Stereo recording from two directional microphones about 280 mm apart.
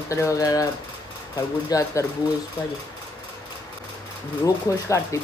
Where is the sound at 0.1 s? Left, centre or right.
Centre.